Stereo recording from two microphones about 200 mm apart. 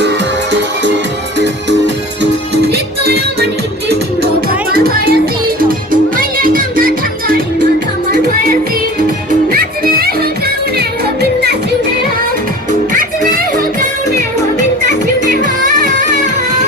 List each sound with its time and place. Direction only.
0.0 s music: 60° right (ahead or behind)
2.6 s music: 50° right (ahead or behind)
4.4 s music: 50° right (ahead or behind)
9.5 s music: 45° right (ahead or behind)
15.3 s music: 40° right (ahead or behind)